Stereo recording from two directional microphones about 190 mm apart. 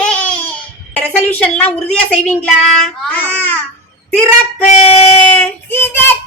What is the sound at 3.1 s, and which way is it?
Baby cry, 10° left (ahead or behind).